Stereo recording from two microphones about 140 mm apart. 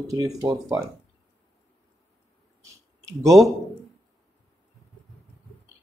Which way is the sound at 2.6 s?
25° right (ahead or behind).